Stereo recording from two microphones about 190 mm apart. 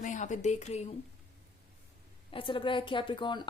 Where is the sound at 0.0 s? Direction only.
40° left (ahead or behind).